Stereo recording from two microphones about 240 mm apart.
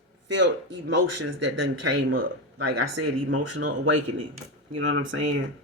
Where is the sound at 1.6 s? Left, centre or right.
Right.